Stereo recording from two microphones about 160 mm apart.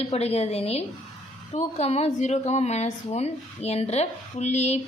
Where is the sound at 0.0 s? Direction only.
40° left (ahead or behind).